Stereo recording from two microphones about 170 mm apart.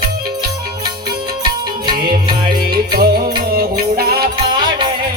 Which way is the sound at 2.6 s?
65° right (ahead or behind).